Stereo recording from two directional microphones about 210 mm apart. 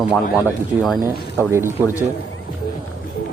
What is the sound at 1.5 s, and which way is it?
Speech, 10° right (ahead or behind).